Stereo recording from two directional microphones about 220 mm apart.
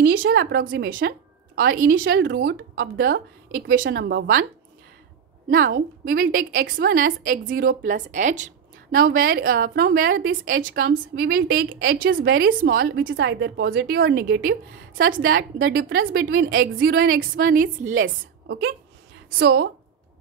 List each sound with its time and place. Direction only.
0.1 s a woman's voice: 55° right (ahead or behind)
5.5 s a woman's voice: 40° right (ahead or behind)
18.0 s a woman's voice: 50° right (ahead or behind)